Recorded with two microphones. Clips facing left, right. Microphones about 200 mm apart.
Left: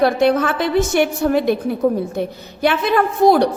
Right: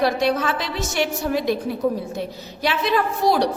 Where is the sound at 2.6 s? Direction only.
55° left (ahead or behind).